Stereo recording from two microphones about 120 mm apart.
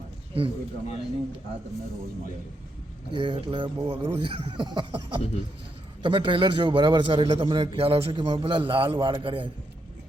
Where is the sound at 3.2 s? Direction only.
45° right (ahead or behind).